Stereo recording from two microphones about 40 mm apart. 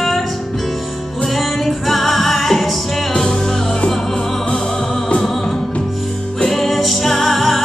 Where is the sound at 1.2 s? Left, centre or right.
Centre.